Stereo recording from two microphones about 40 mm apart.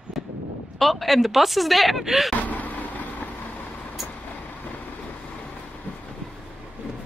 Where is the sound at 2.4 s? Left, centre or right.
Left.